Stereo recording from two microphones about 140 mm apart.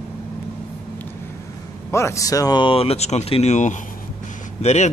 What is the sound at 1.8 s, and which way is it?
Speech, 20° left (ahead or behind).